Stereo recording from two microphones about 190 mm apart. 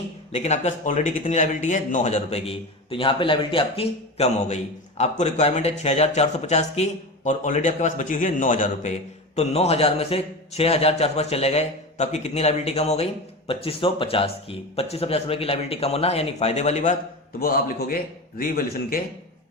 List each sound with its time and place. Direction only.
0.3 s speech: 35° left (ahead or behind)
17.4 s a man's voice: 50° left (ahead or behind)